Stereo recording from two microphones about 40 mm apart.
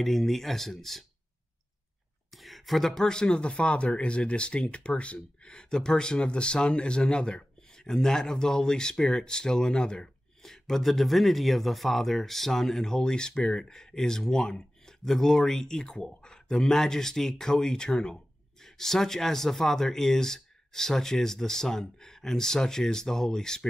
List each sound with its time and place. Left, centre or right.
0.0 s speech: centre
2.3 s speech: centre; by 5.5 s left
5.5 s speech: centre
10.4 s speech: centre
12.9 s speech: centre